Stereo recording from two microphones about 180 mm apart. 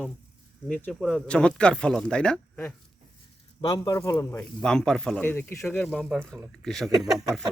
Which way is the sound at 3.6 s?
20° left (ahead or behind).